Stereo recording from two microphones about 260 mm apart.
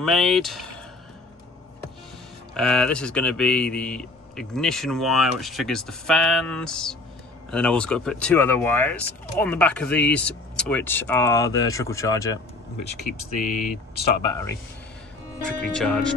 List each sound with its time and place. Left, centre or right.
0.0 s speech: centre
2.5 s speech: centre
13.4 s speech: left
14.2 s speech: centre